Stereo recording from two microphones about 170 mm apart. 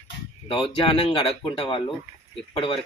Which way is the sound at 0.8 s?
30° left (ahead or behind).